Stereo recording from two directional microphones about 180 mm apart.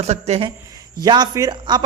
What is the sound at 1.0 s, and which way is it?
Speech, 20° right (ahead or behind).